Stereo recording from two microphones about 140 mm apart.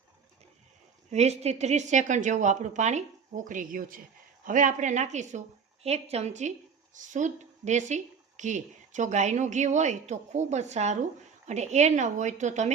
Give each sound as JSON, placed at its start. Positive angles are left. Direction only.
{"t": 1.1, "sound": "speech", "side_deg": -50}
{"t": 4.4, "sound": "speech", "side_deg": -70}
{"t": 5.8, "sound": "a woman's voice", "side_deg": -50}
{"t": 6.9, "sound": "speech", "side_deg": -65}